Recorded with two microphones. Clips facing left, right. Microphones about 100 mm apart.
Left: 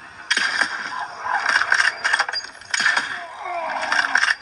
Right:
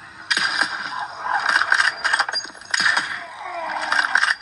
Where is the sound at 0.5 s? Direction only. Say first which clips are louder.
Even; 10° right (ahead or behind).